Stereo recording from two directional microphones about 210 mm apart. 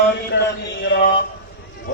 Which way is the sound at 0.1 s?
50° left (ahead or behind).